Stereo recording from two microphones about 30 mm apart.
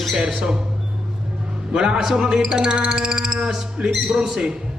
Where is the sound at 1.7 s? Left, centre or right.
Right.